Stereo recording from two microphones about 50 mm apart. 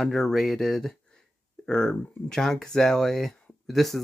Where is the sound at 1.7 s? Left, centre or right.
Centre.